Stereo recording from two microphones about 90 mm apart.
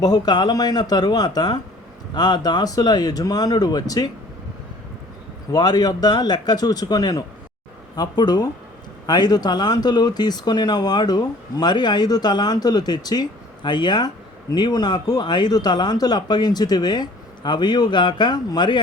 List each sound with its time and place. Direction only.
0.0 s speech: 50° left (ahead or behind)
5.5 s speech: 50° left (ahead or behind)